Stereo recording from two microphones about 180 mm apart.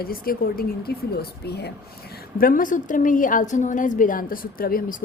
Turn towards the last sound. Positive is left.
turn(degrees=55)  # may be behind; listen again after turning